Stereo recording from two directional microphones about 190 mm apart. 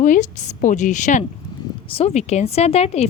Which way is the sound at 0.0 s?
40° left (ahead or behind).